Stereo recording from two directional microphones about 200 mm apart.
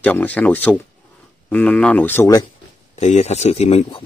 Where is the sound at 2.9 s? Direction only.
35° left (ahead or behind).